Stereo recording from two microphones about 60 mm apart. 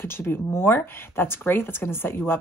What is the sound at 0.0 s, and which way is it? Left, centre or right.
Speech, left.